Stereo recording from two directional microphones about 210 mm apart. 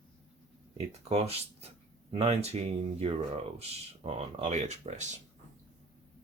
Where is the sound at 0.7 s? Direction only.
30° right (ahead or behind).